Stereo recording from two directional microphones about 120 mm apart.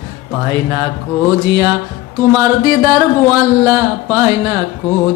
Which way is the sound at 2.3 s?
30° right (ahead or behind).